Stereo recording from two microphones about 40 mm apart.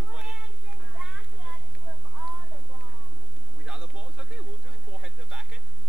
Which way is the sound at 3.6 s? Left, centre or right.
Right.